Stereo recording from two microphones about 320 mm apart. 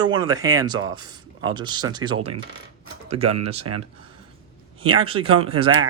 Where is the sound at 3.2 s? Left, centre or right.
Right.